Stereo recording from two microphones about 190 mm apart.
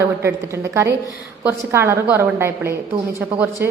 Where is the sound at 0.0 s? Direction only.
15° right (ahead or behind).